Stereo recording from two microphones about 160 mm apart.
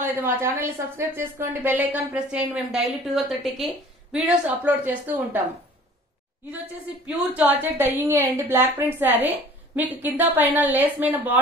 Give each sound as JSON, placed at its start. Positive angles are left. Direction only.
{"t": 0.0, "sound": "a woman's voice", "side_deg": -15}
{"t": 4.6, "sound": "a woman's voice", "side_deg": -10}
{"t": 7.1, "sound": "a woman's voice", "side_deg": -10}